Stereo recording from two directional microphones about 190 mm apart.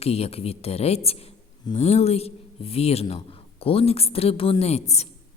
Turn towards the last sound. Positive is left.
turn(degrees=35)  # may be behind; listen again after turning